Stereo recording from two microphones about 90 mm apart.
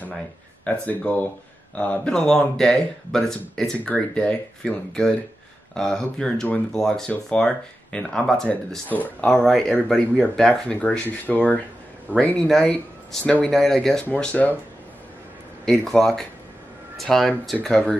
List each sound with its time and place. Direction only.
0.7 s speech: 15° left (ahead or behind)
13.5 s speech: 5° left (ahead or behind)
15.6 s speech: 5° left (ahead or behind)